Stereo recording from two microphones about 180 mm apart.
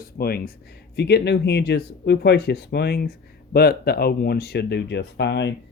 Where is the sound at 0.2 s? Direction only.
55° left (ahead or behind).